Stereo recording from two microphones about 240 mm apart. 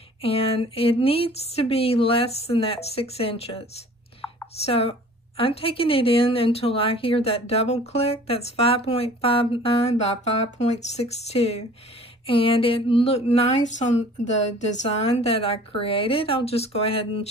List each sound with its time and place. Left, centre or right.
0.2 s speech: left